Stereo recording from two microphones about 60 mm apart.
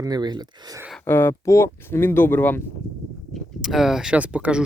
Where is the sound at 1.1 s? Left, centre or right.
Left.